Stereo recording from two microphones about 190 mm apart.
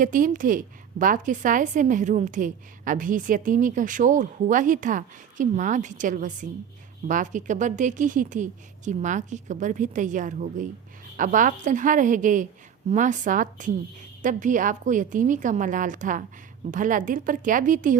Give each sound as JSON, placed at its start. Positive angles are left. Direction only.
{"t": 0.0, "sound": "a woman's voice", "side_deg": -45}